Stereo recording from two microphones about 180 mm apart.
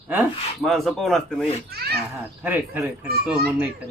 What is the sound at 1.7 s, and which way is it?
Speech, 60° right (ahead or behind).